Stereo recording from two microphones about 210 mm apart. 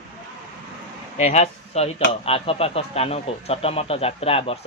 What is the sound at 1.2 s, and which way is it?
A man's voice, 30° left (ahead or behind).